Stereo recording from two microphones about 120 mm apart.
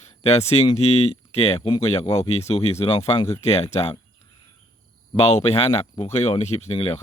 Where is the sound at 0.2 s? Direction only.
60° left (ahead or behind).